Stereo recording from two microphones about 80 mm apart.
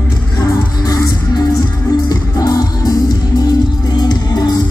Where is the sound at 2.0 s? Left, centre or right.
Left.